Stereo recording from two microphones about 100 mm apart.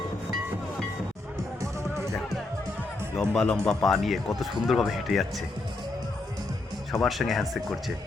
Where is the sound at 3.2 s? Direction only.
10° left (ahead or behind).